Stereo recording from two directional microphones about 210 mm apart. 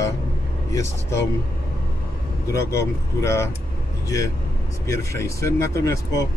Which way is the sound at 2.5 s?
15° left (ahead or behind).